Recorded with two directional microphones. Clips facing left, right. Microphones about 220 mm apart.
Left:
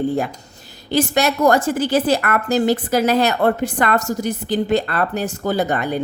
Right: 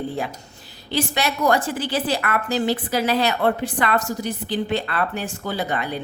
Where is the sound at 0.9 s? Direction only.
45° left (ahead or behind).